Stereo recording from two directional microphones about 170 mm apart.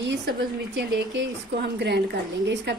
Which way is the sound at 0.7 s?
85° right.